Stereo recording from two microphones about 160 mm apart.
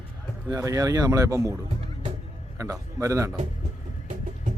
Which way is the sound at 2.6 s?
20° right (ahead or behind).